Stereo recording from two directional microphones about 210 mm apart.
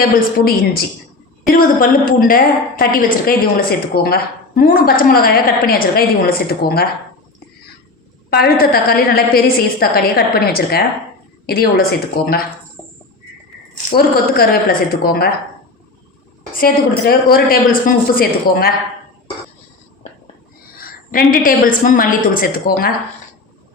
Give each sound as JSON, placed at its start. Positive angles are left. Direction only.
{"t": 0.0, "sound": "a woman's voice", "side_deg": 45}
{"t": 8.3, "sound": "a woman's voice", "side_deg": 45}
{"t": 13.9, "sound": "a woman's voice", "side_deg": 45}
{"t": 16.6, "sound": "a woman's voice", "side_deg": 45}
{"t": 20.7, "sound": "a sound", "side_deg": 45}
{"t": 21.8, "sound": "a woman's voice", "side_deg": 40}